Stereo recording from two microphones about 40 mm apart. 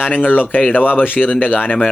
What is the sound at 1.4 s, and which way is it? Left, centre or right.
Speech, left.